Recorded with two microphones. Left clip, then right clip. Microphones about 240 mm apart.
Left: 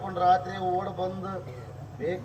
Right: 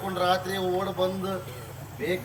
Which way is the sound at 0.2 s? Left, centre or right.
Right.